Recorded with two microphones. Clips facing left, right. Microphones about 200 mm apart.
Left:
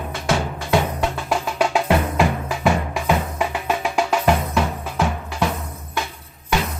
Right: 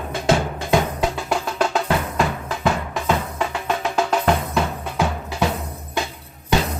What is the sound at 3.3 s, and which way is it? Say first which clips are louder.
Music: left 1 dB; 10° left (ahead or behind).